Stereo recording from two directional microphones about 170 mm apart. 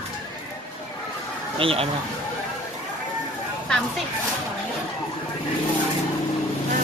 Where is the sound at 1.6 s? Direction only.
35° right (ahead or behind).